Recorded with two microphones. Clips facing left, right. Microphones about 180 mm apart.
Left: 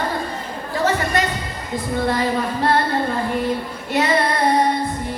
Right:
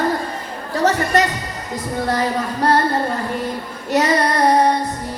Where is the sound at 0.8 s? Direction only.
40° right (ahead or behind).